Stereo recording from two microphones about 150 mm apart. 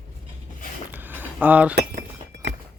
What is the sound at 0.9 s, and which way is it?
Cutlery, 10° right (ahead or behind).